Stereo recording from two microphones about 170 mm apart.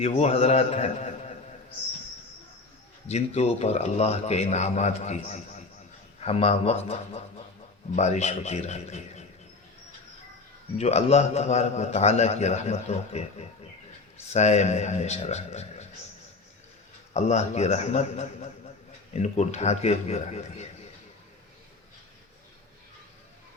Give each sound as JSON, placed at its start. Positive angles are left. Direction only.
{"t": 0.0, "sound": "a man's voice", "side_deg": 35}
{"t": 3.1, "sound": "a man's voice", "side_deg": 40}
{"t": 10.8, "sound": "a man's voice", "side_deg": 40}
{"t": 14.3, "sound": "a man's voice", "side_deg": 40}
{"t": 17.2, "sound": "a man's voice", "side_deg": 40}